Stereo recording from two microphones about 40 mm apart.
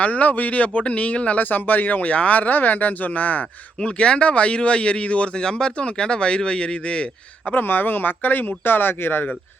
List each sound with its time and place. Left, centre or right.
0.0 s speech: left
1.4 s speech: left
3.8 s speech: left
7.5 s speech: left